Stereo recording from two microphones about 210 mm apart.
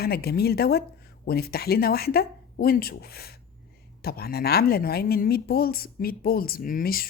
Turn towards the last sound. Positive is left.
turn(degrees=45)  # may be behind; listen again after turning